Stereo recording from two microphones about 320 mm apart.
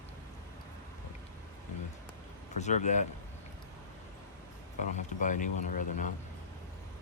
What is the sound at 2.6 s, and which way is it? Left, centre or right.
Speech, left.